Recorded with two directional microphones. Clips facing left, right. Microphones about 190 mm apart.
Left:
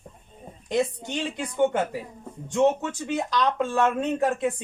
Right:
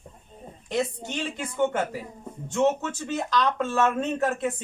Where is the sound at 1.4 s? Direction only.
15° left (ahead or behind).